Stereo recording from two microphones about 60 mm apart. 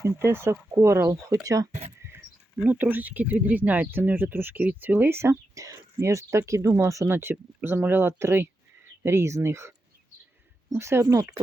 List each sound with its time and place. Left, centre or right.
0.0 s speech: right
2.0 s keys jangling: right
2.6 s speech: right
5.1 s speech: right
5.5 s speech: right
7.1 s speech: right